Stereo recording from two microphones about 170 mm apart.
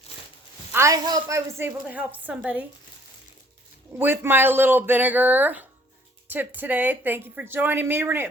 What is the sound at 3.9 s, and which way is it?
Speech, 15° right (ahead or behind).